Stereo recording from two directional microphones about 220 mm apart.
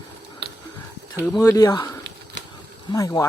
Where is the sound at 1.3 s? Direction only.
15° left (ahead or behind).